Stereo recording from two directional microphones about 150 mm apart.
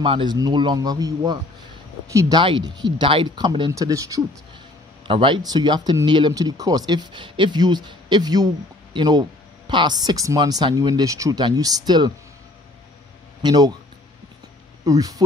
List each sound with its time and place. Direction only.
0.0 s speech: 35° right (ahead or behind)
5.0 s speech: 35° right (ahead or behind)
13.4 s a man's voice: 25° right (ahead or behind)
14.9 s speech: 25° right (ahead or behind)